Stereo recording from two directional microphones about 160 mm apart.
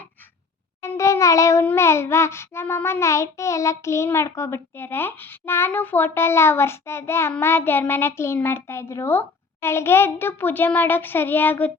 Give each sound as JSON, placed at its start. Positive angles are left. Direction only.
{"t": 0.8, "sound": "child singing", "side_deg": 20}